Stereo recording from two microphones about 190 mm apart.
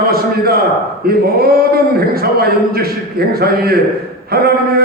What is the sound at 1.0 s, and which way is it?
A man's voice, 55° right (ahead or behind).